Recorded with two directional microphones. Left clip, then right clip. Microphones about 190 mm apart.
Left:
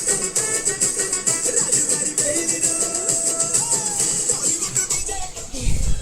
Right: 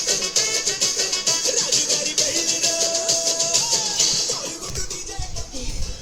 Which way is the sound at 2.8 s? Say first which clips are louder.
Right 3 dB; 50° left (ahead or behind).